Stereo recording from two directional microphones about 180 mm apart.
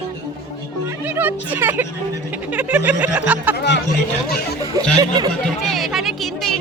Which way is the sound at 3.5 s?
70° left (ahead or behind).